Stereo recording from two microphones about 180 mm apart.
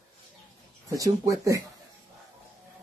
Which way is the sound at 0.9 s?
20° right (ahead or behind).